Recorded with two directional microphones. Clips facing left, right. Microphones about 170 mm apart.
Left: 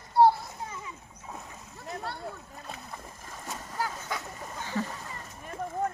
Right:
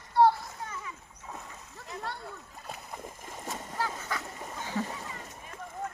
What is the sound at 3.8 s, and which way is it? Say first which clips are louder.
Duck: left 1 dB; 15° left (ahead or behind).